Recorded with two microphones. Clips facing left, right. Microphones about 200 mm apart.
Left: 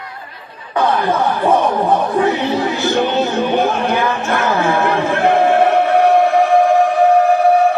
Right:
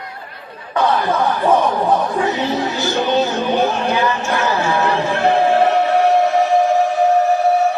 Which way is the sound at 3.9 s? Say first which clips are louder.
Left 1 dB; 55° left (ahead or behind).